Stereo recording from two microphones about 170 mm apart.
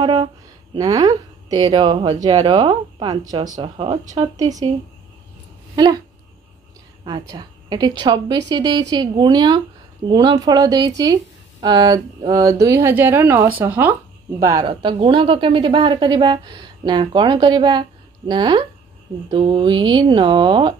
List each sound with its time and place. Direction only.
0.0 s a woman's voice: 25° right (ahead or behind)
5.8 s a woman's voice: 25° right (ahead or behind)
7.1 s a woman's voice: 30° right (ahead or behind)